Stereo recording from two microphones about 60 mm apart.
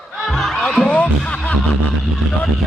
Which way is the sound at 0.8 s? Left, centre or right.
Left.